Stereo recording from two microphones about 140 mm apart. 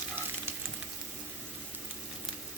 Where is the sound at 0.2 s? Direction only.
15° right (ahead or behind).